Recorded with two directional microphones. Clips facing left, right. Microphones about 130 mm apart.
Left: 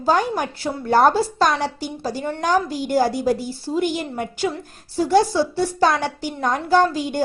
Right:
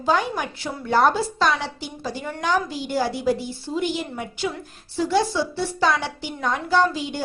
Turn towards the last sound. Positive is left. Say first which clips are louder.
# left 4 dB
turn(degrees=45)  # may be behind; listen again after turning